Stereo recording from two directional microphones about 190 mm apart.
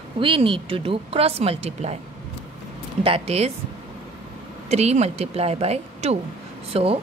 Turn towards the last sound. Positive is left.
turn(degrees=-30)  # may be behind; listen again after turning